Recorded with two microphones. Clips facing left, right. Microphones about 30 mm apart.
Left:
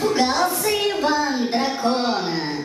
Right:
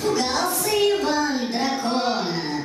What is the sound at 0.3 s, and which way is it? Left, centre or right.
Music, centre.